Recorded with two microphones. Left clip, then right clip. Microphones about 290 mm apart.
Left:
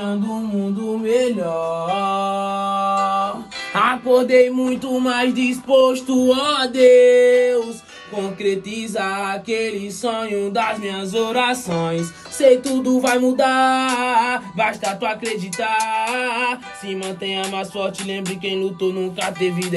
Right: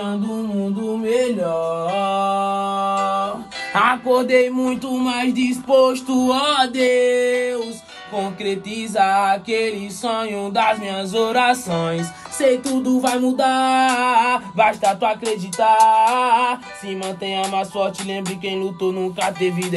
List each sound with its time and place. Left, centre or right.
0.0 s music: centre
1.0 s mantra: centre
3.7 s music: centre
5.7 s music: right
6.2 s music: centre